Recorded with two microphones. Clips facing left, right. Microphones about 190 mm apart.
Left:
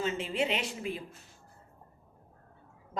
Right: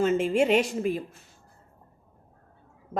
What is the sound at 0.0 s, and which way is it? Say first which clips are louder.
Speech: right 9 dB; 50° right (ahead or behind).